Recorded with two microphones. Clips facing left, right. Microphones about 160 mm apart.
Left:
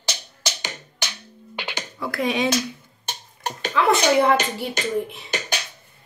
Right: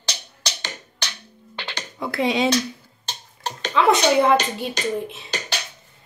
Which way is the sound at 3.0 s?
10° left (ahead or behind).